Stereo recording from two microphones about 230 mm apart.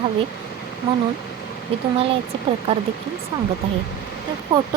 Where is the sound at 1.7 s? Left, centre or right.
Right.